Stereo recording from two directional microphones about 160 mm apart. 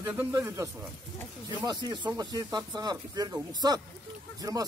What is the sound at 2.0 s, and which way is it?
Speech, 25° right (ahead or behind).